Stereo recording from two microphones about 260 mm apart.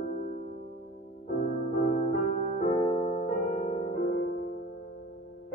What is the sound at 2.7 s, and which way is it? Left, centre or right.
Music, centre.